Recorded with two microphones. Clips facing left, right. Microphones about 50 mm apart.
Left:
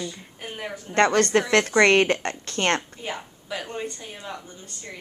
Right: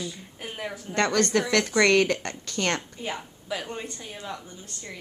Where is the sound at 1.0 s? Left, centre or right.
Left.